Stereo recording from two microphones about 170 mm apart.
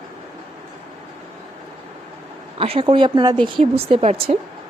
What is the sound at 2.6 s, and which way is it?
Speech, 30° right (ahead or behind).